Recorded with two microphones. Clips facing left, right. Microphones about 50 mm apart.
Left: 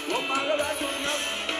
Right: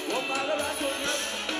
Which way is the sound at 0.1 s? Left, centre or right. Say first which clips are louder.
Left 3 dB; left.